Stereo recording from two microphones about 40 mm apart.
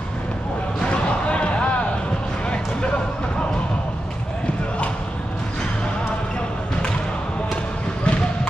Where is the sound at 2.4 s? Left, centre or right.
Left.